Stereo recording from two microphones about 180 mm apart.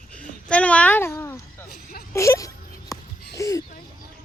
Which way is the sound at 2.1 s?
15° left (ahead or behind).